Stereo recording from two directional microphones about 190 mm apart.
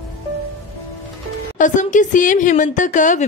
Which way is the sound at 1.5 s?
40° left (ahead or behind).